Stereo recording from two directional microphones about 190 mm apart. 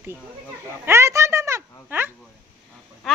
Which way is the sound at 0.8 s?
15° right (ahead or behind).